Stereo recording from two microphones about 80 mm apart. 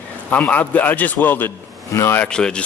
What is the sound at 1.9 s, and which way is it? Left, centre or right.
Speech, left.